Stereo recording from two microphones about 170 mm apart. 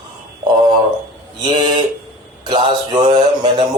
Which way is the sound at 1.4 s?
25° right (ahead or behind).